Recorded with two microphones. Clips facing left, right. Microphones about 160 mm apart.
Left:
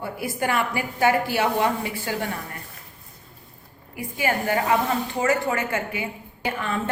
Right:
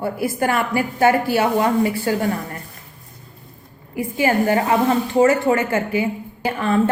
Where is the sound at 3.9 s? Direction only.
30° right (ahead or behind).